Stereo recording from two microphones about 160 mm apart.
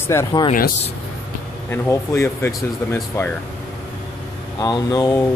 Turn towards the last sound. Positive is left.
turn(degrees=25)  # may be behind; listen again after turning